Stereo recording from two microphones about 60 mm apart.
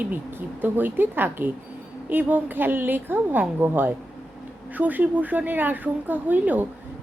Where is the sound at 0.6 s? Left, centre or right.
Right.